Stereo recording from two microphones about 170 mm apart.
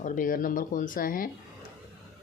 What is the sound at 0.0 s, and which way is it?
Speech, 55° left (ahead or behind).